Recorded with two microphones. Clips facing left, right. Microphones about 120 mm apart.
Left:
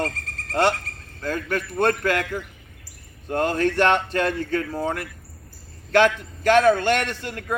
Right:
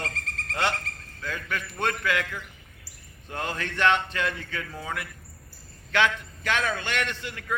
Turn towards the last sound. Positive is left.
turn(degrees=45)  # may be behind; listen again after turning